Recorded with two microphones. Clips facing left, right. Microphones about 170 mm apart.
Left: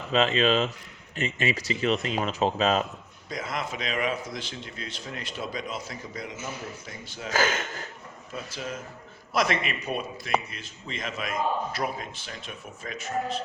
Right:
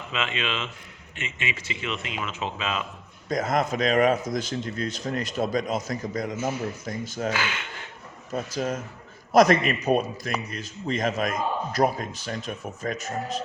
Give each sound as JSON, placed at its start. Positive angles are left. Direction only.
{"t": 0.1, "sound": "speech", "side_deg": 35}
{"t": 3.2, "sound": "a man's voice", "side_deg": -45}
{"t": 7.3, "sound": "speech", "side_deg": 40}
{"t": 8.3, "sound": "a man's voice", "side_deg": -45}